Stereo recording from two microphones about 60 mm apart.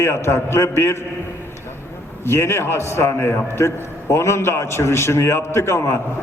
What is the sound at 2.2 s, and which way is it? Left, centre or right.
A man's voice, left.